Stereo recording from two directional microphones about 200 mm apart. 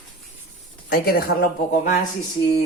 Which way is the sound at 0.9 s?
50° left (ahead or behind).